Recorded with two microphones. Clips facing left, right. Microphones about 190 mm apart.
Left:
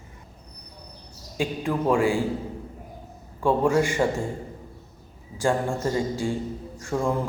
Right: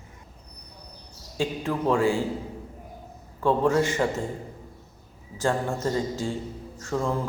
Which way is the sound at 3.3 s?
15° left (ahead or behind).